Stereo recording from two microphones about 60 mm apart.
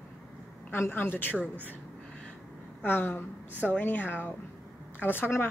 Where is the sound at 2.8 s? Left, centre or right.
Left.